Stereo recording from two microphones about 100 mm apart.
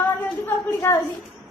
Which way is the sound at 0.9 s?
20° left (ahead or behind).